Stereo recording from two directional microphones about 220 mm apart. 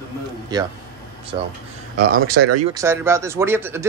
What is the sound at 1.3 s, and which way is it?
Speech, 20° right (ahead or behind).